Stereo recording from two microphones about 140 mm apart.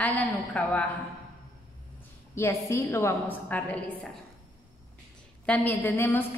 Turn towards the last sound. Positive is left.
turn(degrees=15)  # may be behind; listen again after turning